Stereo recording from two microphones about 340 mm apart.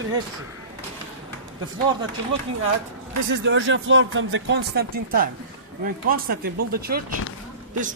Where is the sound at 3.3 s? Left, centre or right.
Right.